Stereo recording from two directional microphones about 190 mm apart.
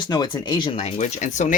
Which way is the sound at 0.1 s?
20° left (ahead or behind).